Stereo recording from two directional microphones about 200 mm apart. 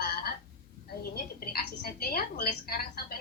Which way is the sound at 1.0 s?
50° left (ahead or behind).